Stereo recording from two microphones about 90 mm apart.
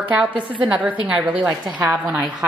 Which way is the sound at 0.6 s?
15° right (ahead or behind).